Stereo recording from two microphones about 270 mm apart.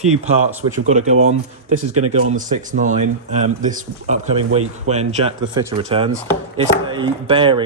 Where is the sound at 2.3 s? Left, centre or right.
Right.